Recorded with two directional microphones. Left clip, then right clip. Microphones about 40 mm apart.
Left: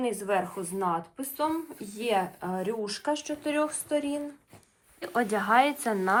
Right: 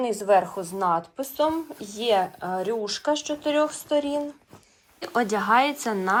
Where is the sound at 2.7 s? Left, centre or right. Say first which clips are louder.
Right 5 dB; right.